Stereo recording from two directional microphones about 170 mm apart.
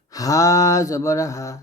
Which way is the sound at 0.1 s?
20° left (ahead or behind).